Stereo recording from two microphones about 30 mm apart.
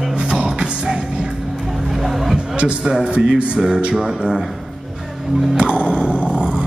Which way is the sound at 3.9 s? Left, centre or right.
Right.